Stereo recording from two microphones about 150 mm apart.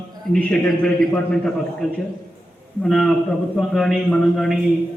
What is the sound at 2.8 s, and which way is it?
A man's voice, centre (ahead or behind).